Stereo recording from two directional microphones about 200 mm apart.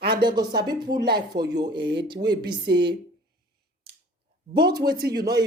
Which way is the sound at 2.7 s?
60° right (ahead or behind).